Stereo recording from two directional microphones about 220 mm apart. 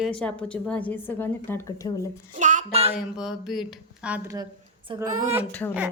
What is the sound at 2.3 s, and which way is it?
Speech, 35° right (ahead or behind).